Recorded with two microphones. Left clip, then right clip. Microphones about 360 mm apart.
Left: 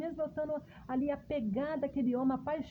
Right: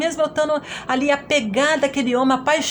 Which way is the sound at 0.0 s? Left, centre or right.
Left.